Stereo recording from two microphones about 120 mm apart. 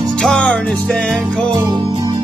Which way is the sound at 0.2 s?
5° left (ahead or behind).